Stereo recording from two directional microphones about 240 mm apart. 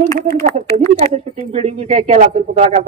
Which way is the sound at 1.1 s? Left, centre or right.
Right.